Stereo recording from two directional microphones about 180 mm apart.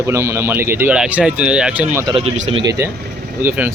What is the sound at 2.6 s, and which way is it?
Speech, 15° right (ahead or behind).